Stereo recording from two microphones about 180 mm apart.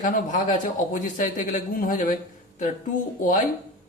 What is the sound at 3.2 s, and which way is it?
Speech, 45° left (ahead or behind).